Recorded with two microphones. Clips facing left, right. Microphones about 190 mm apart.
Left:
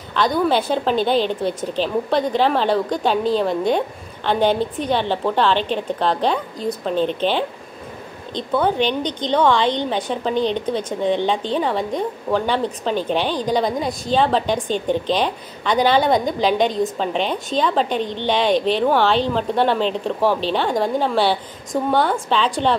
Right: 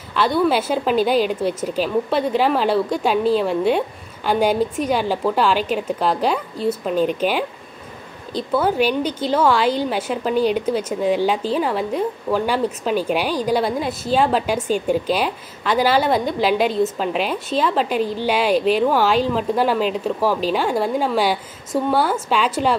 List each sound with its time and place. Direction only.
0.1 s a woman's voice: 5° right (ahead or behind)